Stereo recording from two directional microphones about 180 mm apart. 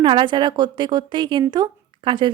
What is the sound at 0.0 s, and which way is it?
A woman's voice, 25° right (ahead or behind).